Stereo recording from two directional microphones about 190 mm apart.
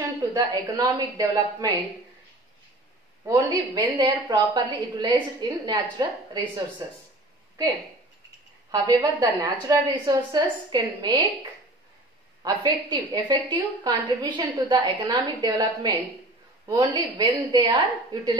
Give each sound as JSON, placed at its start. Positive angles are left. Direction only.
{"t": 0.3, "sound": "a woman's voice", "side_deg": -20}
{"t": 3.3, "sound": "a woman's voice", "side_deg": -20}
{"t": 8.7, "sound": "a woman's voice", "side_deg": -20}
{"t": 12.6, "sound": "a woman's voice", "side_deg": -25}